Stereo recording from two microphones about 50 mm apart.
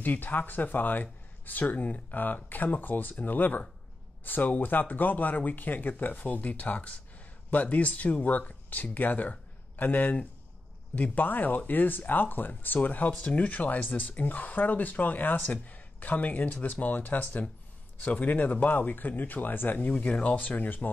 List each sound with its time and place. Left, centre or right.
0.0 s speech: left
19.9 s speech: left